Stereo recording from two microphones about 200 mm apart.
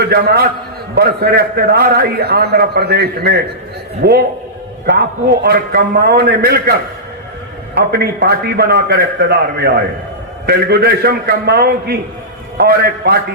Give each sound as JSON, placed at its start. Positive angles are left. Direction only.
{"t": 0.1, "sound": "a man's voice", "side_deg": -50}
{"t": 5.4, "sound": "a man's voice", "side_deg": -50}
{"t": 7.9, "sound": "a man's voice", "side_deg": -50}